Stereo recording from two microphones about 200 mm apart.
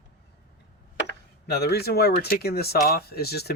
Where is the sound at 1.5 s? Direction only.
55° left (ahead or behind).